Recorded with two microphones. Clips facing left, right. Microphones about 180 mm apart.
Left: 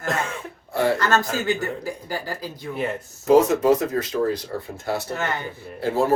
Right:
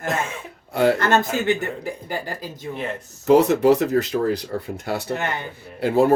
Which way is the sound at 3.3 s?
65° right (ahead or behind).